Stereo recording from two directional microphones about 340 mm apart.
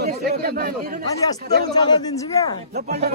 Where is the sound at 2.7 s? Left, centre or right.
Right.